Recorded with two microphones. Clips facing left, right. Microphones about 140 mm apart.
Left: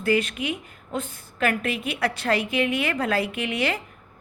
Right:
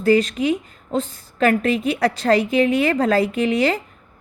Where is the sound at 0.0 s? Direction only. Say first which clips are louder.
Right 7 dB; 35° right (ahead or behind).